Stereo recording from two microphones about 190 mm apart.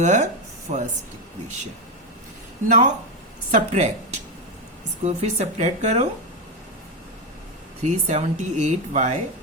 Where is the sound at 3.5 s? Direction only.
40° right (ahead or behind).